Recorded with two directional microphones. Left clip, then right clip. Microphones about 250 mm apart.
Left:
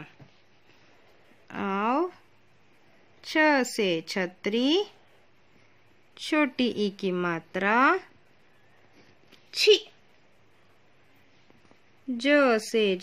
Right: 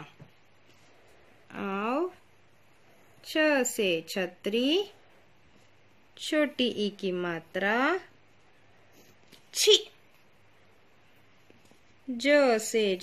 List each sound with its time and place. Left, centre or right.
1.5 s a sound: left
3.3 s speech: left
6.1 s speech: left
9.5 s speech: left
12.2 s speech: left